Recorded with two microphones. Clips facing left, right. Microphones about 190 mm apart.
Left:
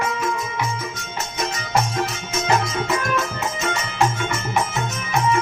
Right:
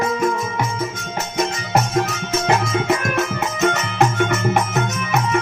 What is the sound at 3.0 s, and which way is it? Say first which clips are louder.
Music: right 3 dB; 55° right (ahead or behind).